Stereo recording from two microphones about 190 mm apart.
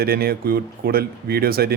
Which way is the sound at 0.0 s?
55° right (ahead or behind).